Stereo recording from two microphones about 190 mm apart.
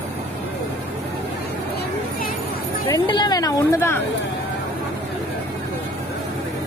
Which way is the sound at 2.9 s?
20° left (ahead or behind).